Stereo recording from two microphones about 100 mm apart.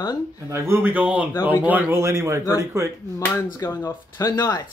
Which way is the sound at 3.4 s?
30° left (ahead or behind).